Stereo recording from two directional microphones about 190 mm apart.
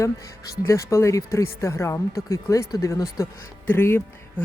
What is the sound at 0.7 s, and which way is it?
Speech, 15° left (ahead or behind).